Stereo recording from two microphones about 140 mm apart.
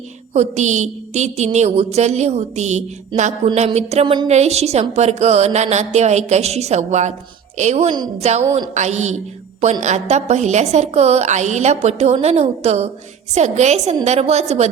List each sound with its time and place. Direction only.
0.3 s a woman's voice: 55° right (ahead or behind)
4.0 s a woman's voice: 35° right (ahead or behind)
4.3 s a woman's voice: 50° right (ahead or behind)